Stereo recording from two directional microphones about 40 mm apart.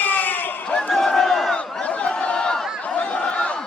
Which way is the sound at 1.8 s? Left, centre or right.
Left.